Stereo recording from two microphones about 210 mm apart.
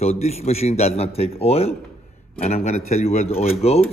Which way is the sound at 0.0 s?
30° left (ahead or behind).